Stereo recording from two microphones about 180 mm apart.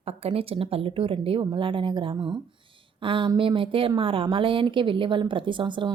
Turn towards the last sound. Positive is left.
turn(degrees=-25)  # may be behind; listen again after turning